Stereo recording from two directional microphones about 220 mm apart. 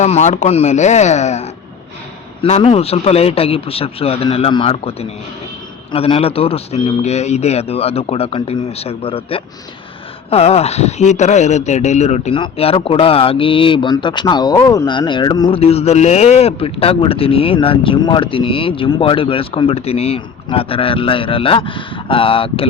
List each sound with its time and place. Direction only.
0.0 s speech: 30° left (ahead or behind)